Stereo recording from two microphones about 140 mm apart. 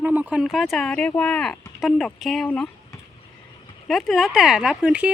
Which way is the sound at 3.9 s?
Centre (ahead or behind).